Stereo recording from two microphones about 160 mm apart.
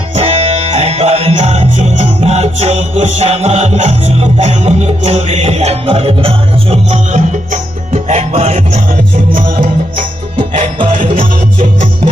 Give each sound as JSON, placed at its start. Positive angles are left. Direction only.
{"t": 0.2, "sound": "music", "side_deg": -45}
{"t": 11.1, "sound": "music", "side_deg": -55}